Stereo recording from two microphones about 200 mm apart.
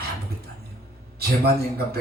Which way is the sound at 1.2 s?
50° right (ahead or behind).